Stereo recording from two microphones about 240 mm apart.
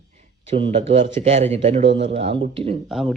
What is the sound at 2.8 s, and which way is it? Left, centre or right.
Speech, centre.